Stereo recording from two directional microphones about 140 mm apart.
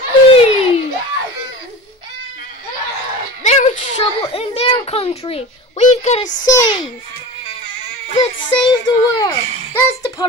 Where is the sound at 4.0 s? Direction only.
45° left (ahead or behind).